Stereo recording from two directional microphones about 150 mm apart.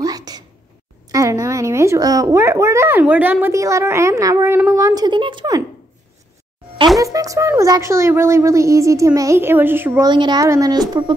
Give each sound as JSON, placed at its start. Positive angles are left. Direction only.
{"t": 0.0, "sound": "a sound", "side_deg": -25}
{"t": 1.1, "sound": "speech", "side_deg": -20}
{"t": 7.0, "sound": "speech", "side_deg": -20}
{"t": 10.0, "sound": "speech", "side_deg": -30}